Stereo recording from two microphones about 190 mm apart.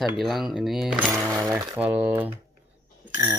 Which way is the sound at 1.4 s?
15° right (ahead or behind).